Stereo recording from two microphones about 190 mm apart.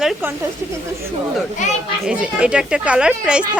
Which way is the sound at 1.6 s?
40° left (ahead or behind).